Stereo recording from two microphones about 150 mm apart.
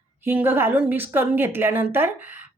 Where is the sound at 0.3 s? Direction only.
15° right (ahead or behind).